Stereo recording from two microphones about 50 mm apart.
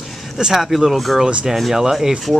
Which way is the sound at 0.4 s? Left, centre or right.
Centre.